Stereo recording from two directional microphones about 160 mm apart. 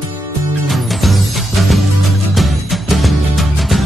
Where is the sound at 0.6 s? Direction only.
Centre (ahead or behind).